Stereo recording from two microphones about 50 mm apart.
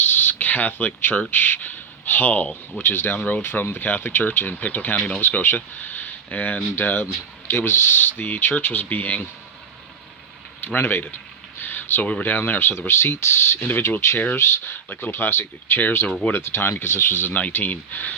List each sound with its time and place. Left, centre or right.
0.0 s a sound: left
2.9 s speech: left
4.9 s speech: left
5.2 s speech: left
10.6 s speech: left
11.6 s a sound: left
12.2 s speech: left
13.6 s speech: left
14.0 s speech: left
17.5 s speech: left